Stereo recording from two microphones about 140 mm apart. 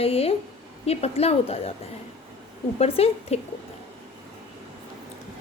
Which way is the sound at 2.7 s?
45° left (ahead or behind).